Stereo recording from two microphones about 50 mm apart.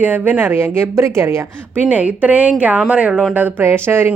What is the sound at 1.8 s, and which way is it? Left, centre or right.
A woman's voice, right.